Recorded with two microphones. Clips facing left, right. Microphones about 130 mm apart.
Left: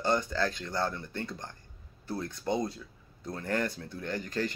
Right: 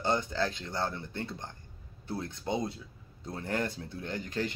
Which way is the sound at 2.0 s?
25° right (ahead or behind).